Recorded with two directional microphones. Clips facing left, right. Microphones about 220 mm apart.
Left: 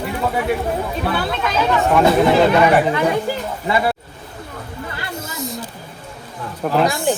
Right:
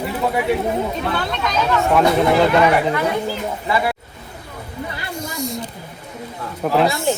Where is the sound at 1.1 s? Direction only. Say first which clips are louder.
Left 1 dB; 5° left (ahead or behind).